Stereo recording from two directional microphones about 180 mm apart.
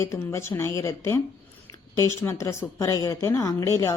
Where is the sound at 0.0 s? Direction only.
15° left (ahead or behind).